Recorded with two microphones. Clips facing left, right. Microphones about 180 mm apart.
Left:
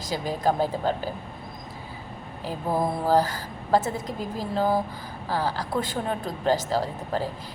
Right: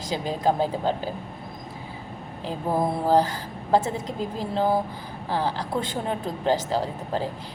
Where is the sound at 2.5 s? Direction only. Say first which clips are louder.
Right 1 dB; 20° right (ahead or behind).